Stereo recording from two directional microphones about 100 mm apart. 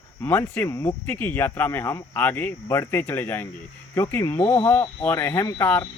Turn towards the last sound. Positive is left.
turn(degrees=25)  # may be behind; listen again after turning